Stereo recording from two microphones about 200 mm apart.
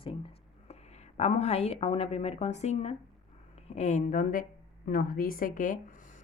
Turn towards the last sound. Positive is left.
turn(degrees=40)  # may be behind; listen again after turning